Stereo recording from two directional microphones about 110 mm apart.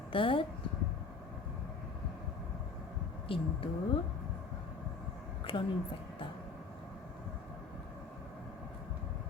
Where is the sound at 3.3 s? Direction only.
55° left (ahead or behind).